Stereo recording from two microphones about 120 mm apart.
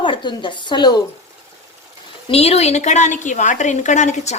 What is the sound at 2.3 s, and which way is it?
A woman's voice, 60° left (ahead or behind).